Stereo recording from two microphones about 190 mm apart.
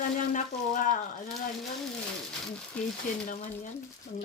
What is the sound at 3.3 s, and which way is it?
Speech, 40° left (ahead or behind).